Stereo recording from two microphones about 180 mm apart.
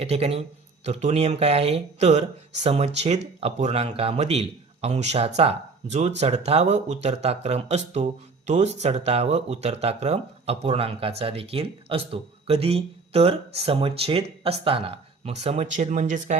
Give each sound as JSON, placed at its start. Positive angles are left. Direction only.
{"t": 0.0, "sound": "speech", "side_deg": -35}